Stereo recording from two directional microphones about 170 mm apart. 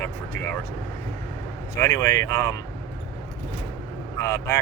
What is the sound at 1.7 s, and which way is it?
Speech, 15° left (ahead or behind).